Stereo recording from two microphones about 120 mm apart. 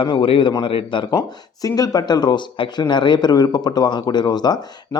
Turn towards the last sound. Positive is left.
turn(degrees=35)  # may be behind; listen again after turning